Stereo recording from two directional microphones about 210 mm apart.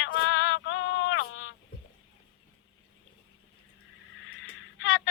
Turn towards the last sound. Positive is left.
turn(degrees=65)  # may be behind; listen again after turning